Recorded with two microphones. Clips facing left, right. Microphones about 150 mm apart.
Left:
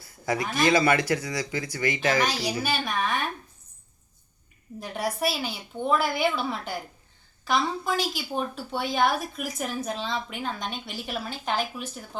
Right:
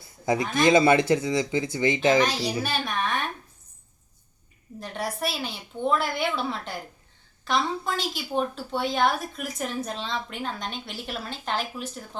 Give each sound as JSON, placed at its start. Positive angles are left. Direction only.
{"t": 0.0, "sound": "speech", "side_deg": -25}
{"t": 2.2, "sound": "a woman's voice", "side_deg": 0}
{"t": 4.8, "sound": "a woman's voice", "side_deg": 0}